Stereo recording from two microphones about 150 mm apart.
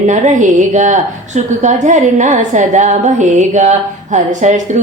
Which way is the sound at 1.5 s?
55° right (ahead or behind).